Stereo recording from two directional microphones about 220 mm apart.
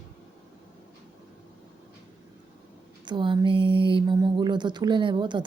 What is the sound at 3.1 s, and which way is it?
Speech, 20° right (ahead or behind).